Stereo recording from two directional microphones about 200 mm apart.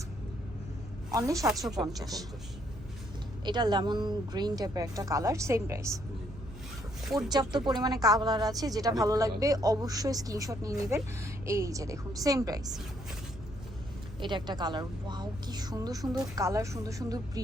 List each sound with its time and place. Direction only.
1.1 s a woman's voice: 15° right (ahead or behind)
3.4 s speech: 20° right (ahead or behind)
7.0 s speech: centre (ahead or behind)
7.3 s speech: 20° right (ahead or behind)
14.2 s a woman's voice: 25° right (ahead or behind)